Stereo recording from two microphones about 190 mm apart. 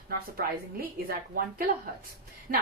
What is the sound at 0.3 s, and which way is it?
Speech, 50° right (ahead or behind).